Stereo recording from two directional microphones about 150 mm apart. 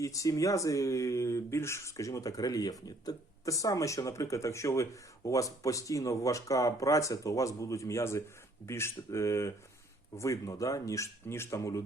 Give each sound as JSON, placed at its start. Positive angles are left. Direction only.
{"t": 0.0, "sound": "speech", "side_deg": 20}